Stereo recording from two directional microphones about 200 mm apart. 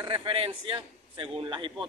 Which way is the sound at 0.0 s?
25° right (ahead or behind).